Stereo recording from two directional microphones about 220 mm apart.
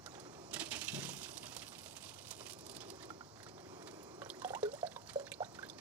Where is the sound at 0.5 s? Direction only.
5° right (ahead or behind).